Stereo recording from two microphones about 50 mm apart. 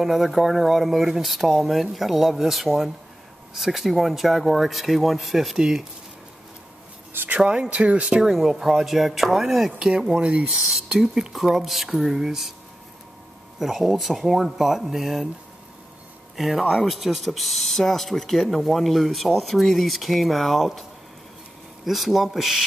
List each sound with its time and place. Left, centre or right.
0.0 s speech: centre
7.3 s speech: right; by 9.7 s centre
9.8 s speech: centre
11.0 s speech: centre
13.6 s speech: centre
16.3 s speech: centre
21.8 s speech: centre